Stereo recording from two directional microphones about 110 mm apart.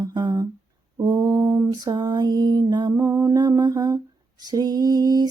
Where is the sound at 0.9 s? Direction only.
35° right (ahead or behind).